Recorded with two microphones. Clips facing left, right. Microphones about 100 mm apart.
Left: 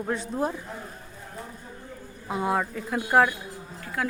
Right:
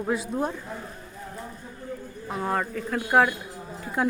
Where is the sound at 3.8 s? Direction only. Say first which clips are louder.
Right 4 dB; 25° right (ahead or behind).